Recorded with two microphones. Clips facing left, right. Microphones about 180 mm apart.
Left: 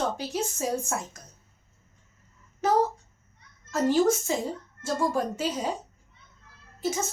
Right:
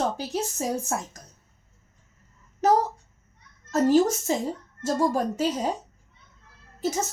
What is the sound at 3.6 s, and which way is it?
A woman's voice, 40° right (ahead or behind).